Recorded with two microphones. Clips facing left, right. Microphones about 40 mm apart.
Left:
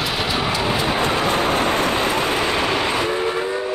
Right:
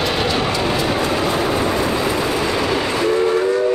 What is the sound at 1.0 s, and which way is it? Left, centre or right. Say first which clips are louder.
Vehicle: even; left.